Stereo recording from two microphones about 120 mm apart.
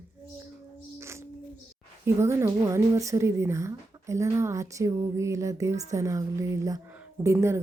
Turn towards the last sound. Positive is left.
turn(degrees=-25)  # may be behind; listen again after turning